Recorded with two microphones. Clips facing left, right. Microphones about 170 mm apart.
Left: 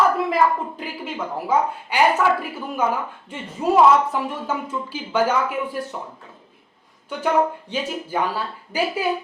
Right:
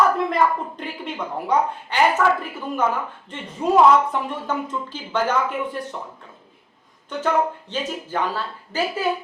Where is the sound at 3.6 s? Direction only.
10° left (ahead or behind).